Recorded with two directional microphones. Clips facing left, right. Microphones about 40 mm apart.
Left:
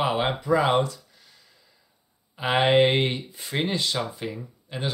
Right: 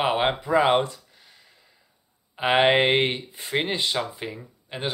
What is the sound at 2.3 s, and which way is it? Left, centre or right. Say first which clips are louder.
Speech: right 1 dB; right.